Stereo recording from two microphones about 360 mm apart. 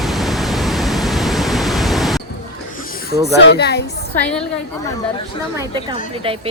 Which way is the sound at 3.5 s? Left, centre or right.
Left.